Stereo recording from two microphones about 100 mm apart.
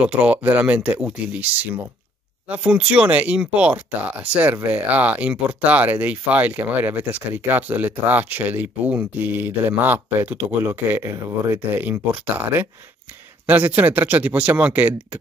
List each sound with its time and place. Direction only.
0.0 s speech: 10° right (ahead or behind)